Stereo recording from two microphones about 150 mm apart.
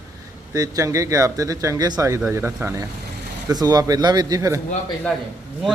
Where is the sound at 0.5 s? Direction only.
25° right (ahead or behind).